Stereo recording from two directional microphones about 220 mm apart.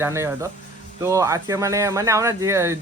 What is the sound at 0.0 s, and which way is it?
Speech, 15° right (ahead or behind).